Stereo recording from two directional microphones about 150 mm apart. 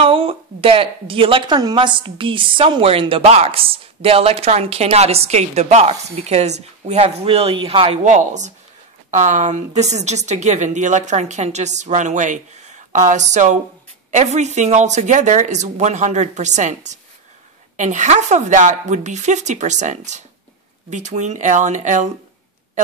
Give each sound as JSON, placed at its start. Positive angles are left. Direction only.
{"t": 0.0, "sound": "a woman's voice", "side_deg": -35}
{"t": 8.0, "sound": "speech", "side_deg": -55}